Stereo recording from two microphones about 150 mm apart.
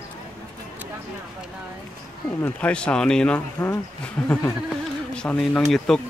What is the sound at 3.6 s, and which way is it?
Speech, 15° left (ahead or behind).